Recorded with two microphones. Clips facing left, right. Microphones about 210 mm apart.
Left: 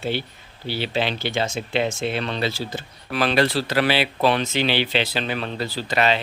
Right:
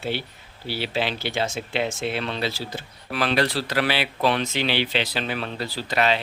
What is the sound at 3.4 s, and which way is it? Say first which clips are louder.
Speech: left 5 dB; 25° left (ahead or behind).